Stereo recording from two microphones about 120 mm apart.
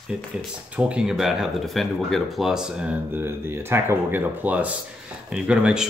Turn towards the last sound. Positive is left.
turn(degrees=-5)  # may be behind; listen again after turning